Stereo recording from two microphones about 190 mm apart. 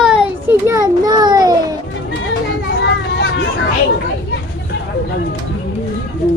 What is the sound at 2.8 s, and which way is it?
Vehicle, 65° left (ahead or behind).